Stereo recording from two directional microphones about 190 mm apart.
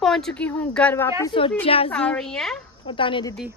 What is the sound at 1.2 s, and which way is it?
Speech, 25° left (ahead or behind).